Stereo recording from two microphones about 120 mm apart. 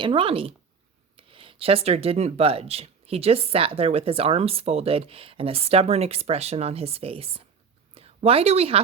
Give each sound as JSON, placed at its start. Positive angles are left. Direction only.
{"t": 0.0, "sound": "a woman's voice", "side_deg": -45}